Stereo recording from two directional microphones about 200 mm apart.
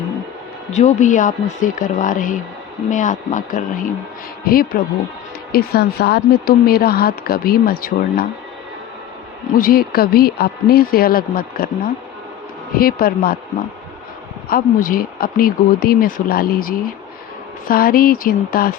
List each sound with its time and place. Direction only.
0.7 s speech: 35° left (ahead or behind)
9.6 s speech: 45° left (ahead or behind)
12.7 s speech: 50° left (ahead or behind)
14.5 s speech: 45° left (ahead or behind)